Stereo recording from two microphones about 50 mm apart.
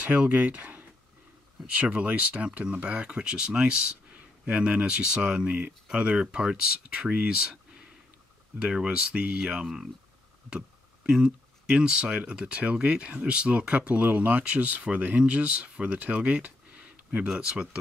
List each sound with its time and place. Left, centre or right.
0.0 s speech: right
11.1 s speech: centre